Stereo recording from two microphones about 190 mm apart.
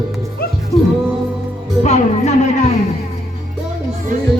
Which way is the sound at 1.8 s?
35° left (ahead or behind).